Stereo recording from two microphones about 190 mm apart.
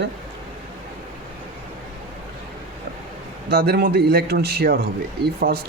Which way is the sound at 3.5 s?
55° right (ahead or behind).